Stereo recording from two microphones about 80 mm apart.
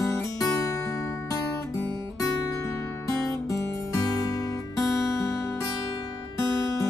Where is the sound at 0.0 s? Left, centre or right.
Left.